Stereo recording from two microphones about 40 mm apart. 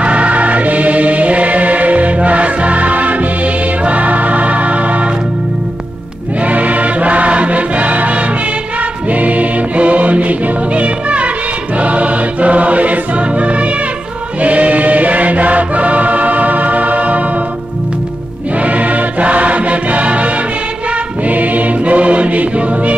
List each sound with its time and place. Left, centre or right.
0.0 s music: right
6.4 s music: right
14.4 s choir: right
18.6 s music: right
21.3 s music: right